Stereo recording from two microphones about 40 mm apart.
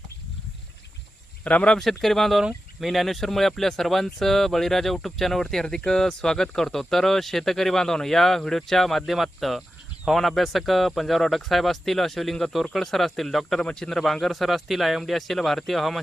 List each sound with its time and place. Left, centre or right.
1.5 s a man's voice: left
1.8 s speech: centre
13.7 s a man's voice: left
13.9 s speech: centre